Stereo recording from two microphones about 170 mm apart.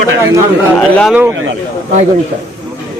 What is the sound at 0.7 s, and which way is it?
Speech, 5° left (ahead or behind).